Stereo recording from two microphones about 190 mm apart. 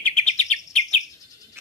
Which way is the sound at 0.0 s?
5° left (ahead or behind).